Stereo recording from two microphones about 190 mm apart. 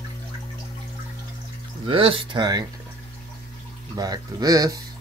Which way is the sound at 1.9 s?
30° right (ahead or behind).